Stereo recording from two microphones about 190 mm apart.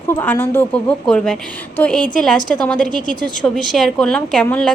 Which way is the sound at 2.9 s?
45° left (ahead or behind).